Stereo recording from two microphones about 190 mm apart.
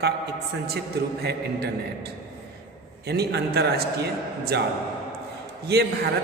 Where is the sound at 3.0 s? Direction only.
60° right (ahead or behind).